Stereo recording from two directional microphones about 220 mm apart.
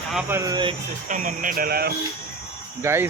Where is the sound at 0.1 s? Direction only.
5° right (ahead or behind).